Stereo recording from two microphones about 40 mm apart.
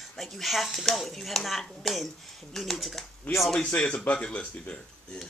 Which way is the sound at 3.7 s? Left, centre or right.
Left.